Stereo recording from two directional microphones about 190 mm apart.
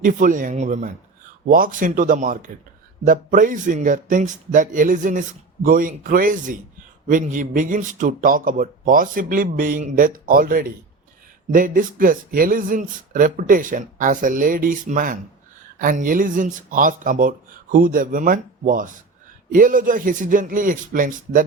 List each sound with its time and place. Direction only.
0.0 s speech: 45° right (ahead or behind)